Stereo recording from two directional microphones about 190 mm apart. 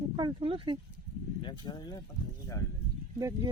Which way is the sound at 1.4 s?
25° left (ahead or behind).